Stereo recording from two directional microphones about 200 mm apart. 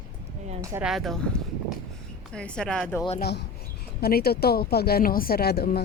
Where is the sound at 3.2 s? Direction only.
55° left (ahead or behind).